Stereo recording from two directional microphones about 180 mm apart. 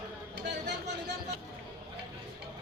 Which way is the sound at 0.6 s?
70° right (ahead or behind).